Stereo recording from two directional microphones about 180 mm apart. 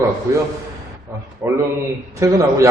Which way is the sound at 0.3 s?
15° right (ahead or behind).